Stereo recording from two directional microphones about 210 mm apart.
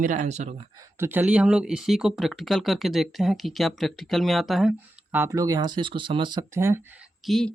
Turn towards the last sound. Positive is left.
turn(degrees=0)  # may be behind; listen again after turning